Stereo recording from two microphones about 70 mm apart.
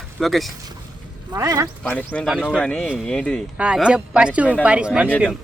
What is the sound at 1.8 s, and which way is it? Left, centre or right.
Speech, centre.